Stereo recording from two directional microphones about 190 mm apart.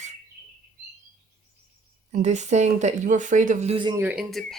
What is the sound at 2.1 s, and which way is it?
Speech, 40° right (ahead or behind).